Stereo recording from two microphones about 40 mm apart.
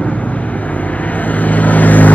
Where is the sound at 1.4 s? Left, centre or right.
Left.